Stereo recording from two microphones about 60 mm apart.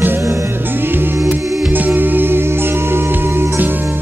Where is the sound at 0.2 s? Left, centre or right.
Right.